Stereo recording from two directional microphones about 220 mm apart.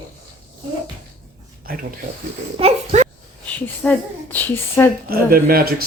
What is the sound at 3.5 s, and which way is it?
Speech, 10° left (ahead or behind).